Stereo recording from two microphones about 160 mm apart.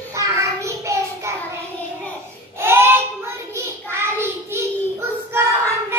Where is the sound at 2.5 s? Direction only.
15° right (ahead or behind).